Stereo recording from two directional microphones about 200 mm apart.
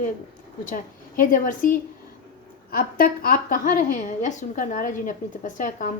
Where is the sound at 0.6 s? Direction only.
40° left (ahead or behind).